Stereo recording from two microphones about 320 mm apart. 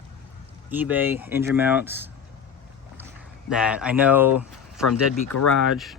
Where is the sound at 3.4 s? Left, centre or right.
Centre.